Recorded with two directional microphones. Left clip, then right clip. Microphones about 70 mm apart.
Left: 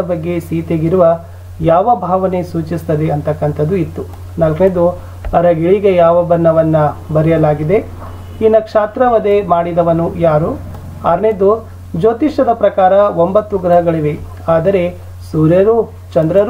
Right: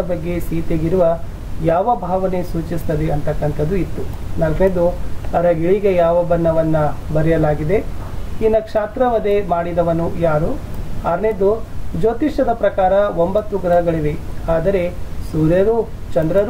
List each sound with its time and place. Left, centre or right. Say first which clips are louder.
0.1 s speech: left 5 dB; centre
12.0 s speech: left 5 dB; centre